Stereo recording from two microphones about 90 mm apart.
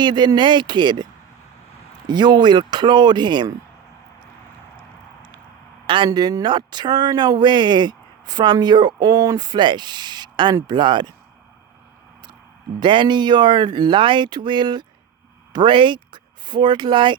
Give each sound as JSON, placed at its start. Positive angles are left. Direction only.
{"t": 0.0, "sound": "speech", "side_deg": -55}
{"t": 2.0, "sound": "speech", "side_deg": -55}
{"t": 5.8, "sound": "speech", "side_deg": -65}
{"t": 6.1, "sound": "speech", "side_deg": -45}
{"t": 12.8, "sound": "speech", "side_deg": -60}